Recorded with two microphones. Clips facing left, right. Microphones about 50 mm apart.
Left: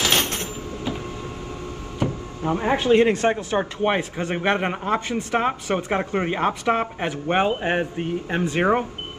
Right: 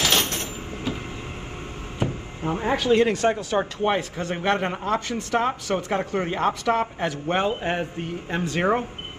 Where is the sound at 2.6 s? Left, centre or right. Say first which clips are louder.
Left 2 dB; left.